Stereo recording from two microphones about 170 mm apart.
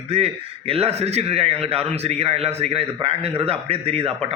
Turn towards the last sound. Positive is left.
turn(degrees=-35)  # may be behind; listen again after turning